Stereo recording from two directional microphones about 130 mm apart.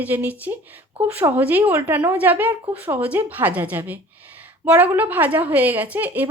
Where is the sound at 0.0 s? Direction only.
10° right (ahead or behind).